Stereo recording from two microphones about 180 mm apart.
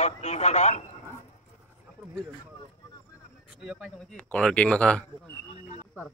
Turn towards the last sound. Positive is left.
turn(degrees=5)  # may be behind; listen again after turning